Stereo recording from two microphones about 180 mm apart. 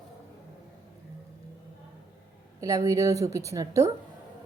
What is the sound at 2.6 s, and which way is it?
A woman's voice, 20° right (ahead or behind).